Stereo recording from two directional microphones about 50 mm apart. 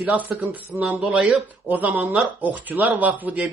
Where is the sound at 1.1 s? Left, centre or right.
Right.